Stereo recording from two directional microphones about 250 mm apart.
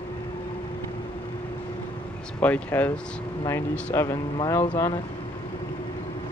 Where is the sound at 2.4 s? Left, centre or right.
Centre.